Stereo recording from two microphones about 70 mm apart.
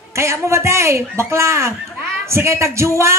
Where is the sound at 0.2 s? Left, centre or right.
Right.